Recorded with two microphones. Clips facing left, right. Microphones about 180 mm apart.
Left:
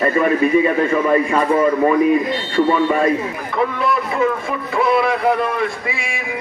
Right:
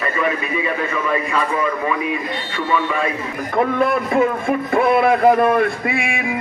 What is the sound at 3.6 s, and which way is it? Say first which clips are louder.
A man's voice: right 2 dB; 50° right (ahead or behind).